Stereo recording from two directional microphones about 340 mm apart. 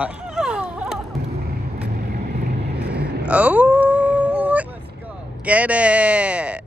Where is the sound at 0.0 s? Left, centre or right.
Centre.